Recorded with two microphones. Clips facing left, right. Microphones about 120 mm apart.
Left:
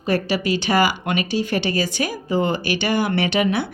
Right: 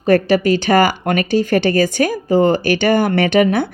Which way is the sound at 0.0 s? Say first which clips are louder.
Right 8 dB; 50° right (ahead or behind).